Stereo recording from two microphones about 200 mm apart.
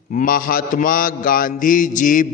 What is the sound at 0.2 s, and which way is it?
A man's voice, 45° left (ahead or behind).